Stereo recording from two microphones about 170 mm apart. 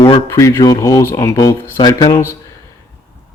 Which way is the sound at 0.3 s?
15° left (ahead or behind).